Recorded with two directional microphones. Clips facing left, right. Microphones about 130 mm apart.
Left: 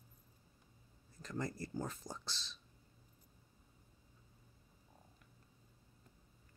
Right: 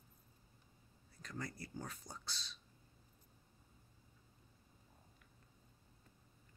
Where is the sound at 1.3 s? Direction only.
40° left (ahead or behind).